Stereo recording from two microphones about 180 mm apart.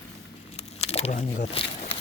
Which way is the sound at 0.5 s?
35° left (ahead or behind).